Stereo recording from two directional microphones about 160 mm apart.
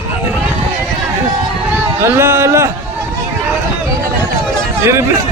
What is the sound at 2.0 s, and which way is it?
Speech, 15° right (ahead or behind).